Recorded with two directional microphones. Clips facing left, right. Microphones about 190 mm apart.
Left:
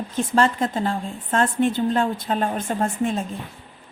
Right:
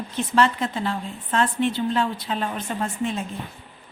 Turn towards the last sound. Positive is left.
turn(degrees=45)  # may be behind; listen again after turning